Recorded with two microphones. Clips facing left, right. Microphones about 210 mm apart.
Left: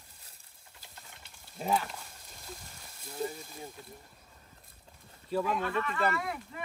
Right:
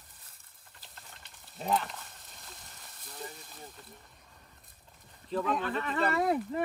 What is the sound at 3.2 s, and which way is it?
Speech, 10° left (ahead or behind).